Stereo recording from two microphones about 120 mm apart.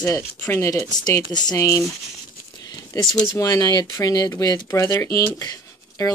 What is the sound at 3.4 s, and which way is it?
Speech, 30° left (ahead or behind).